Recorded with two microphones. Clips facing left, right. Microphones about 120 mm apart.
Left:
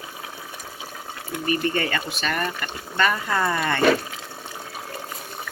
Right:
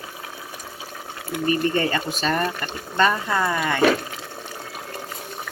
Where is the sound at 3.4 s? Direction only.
5° right (ahead or behind).